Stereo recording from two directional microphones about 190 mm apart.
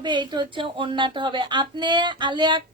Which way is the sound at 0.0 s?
25° right (ahead or behind).